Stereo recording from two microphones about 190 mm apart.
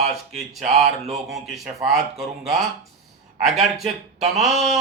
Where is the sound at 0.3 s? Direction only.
Centre (ahead or behind).